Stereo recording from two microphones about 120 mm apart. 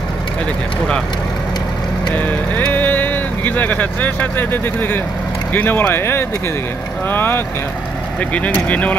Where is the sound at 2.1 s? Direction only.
15° left (ahead or behind).